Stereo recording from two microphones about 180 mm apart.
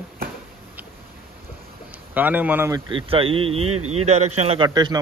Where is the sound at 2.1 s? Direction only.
10° right (ahead or behind).